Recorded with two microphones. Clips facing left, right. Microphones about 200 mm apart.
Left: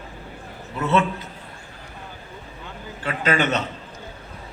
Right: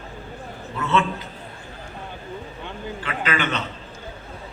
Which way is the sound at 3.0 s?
40° left (ahead or behind).